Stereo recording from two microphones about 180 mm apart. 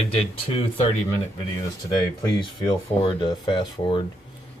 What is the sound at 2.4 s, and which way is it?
A man's voice, 25° left (ahead or behind).